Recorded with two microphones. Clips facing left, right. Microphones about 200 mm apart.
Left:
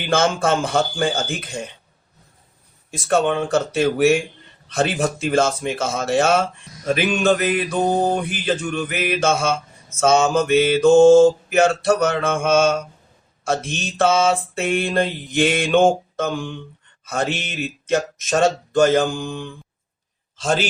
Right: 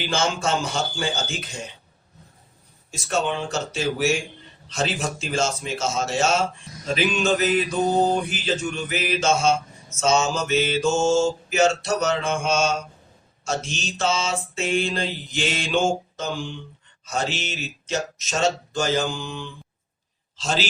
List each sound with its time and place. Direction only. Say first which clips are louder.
0.1 s mantra: left 7 dB; 55° left (ahead or behind)
3.1 s mantra: left 7 dB; 55° left (ahead or behind)
20.3 s a man's voice: left 5 dB; 55° left (ahead or behind)